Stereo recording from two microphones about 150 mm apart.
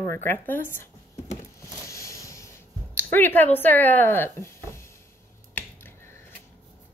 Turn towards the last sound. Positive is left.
turn(degrees=15)  # may be behind; listen again after turning